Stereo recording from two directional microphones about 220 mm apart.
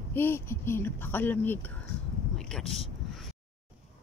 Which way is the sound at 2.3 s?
Centre (ahead or behind).